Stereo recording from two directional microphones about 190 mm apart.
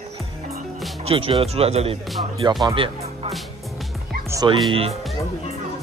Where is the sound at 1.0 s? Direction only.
30° right (ahead or behind).